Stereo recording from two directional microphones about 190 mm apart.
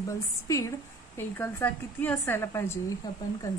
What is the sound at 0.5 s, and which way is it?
A woman's voice, 15° left (ahead or behind).